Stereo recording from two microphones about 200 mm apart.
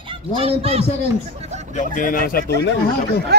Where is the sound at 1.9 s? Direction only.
40° left (ahead or behind).